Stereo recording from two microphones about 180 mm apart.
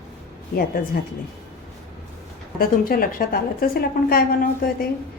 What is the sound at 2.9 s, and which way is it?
A woman's voice, 55° left (ahead or behind).